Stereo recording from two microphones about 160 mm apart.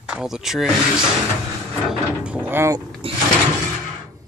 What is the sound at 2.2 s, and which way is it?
Speech, 10° right (ahead or behind).